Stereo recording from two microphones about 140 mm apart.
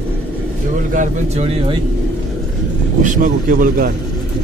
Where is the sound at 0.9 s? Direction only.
65° right (ahead or behind).